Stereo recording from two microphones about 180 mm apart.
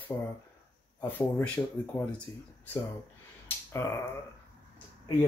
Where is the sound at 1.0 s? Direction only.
10° left (ahead or behind).